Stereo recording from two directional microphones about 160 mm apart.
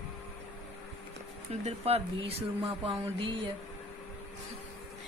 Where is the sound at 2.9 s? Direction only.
35° right (ahead or behind).